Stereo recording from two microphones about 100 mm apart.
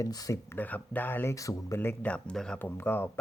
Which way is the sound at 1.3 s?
35° left (ahead or behind).